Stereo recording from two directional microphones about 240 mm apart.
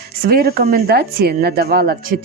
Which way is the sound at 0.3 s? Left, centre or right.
Right.